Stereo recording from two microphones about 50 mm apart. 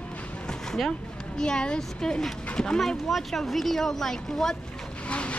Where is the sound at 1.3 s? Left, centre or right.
Centre.